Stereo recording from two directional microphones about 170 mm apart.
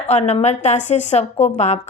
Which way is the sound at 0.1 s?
35° left (ahead or behind).